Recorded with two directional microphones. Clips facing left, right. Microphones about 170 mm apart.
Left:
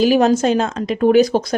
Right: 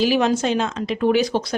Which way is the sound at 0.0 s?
45° left (ahead or behind).